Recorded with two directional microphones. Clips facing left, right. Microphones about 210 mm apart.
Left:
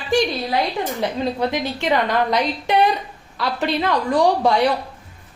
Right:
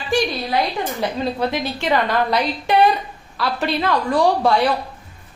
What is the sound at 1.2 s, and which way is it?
A woman's voice, 15° left (ahead or behind).